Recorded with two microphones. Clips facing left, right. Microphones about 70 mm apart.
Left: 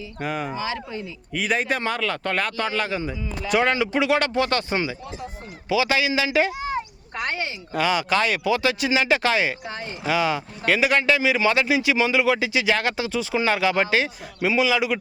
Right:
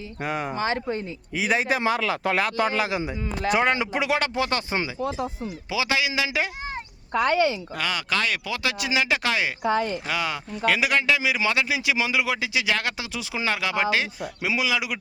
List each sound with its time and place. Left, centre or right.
0.2 s speech: centre
0.5 s speech: right
1.3 s speech: centre
5.0 s speech: right
5.6 s speech: centre
7.8 s speech: centre